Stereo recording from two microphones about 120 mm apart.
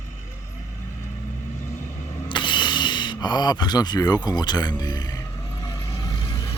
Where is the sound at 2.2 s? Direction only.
40° left (ahead or behind).